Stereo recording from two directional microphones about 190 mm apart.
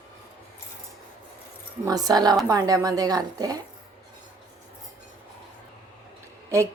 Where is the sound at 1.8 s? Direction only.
20° right (ahead or behind).